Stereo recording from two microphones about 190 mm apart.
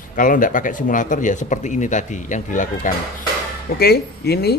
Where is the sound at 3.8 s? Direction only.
55° left (ahead or behind).